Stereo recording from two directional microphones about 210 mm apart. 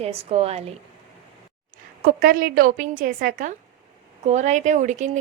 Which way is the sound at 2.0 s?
40° right (ahead or behind).